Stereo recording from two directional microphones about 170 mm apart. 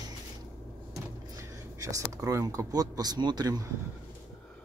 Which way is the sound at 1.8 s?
20° right (ahead or behind).